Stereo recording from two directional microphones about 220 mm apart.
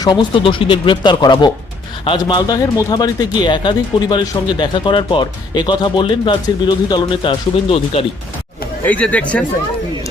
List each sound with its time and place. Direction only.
0.0 s speech: 20° left (ahead or behind)
8.8 s speech: 5° left (ahead or behind)